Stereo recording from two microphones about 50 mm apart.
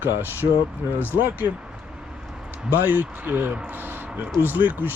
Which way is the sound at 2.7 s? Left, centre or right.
Right.